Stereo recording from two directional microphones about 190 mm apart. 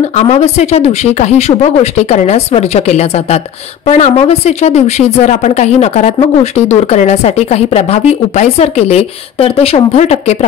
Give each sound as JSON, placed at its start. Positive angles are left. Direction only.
{"t": 0.1, "sound": "speech", "side_deg": 35}